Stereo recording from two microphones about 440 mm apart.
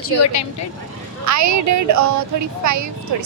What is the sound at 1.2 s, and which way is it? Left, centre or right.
Speech, right.